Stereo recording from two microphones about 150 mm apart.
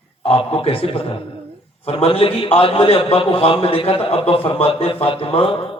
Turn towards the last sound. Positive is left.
turn(degrees=40)  # may be behind; listen again after turning